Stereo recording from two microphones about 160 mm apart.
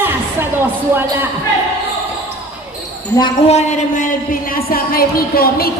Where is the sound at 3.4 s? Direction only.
45° left (ahead or behind).